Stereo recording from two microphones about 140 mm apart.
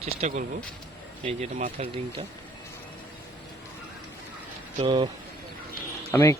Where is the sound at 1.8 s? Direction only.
50° right (ahead or behind).